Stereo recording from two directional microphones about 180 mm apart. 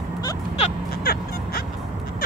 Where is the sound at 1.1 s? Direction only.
60° left (ahead or behind).